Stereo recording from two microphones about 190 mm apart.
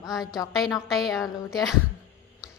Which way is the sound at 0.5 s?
Centre (ahead or behind).